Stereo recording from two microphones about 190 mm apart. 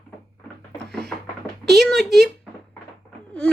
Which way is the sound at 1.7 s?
Centre (ahead or behind).